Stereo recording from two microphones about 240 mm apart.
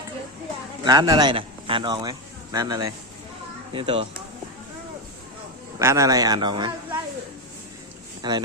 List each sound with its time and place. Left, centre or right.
0.9 s speech: centre
5.8 s a man's voice: centre
8.2 s a man's voice: centre